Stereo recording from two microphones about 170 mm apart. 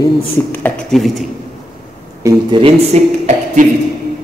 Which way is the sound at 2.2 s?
20° right (ahead or behind).